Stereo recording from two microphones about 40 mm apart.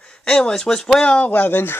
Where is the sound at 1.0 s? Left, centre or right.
Left.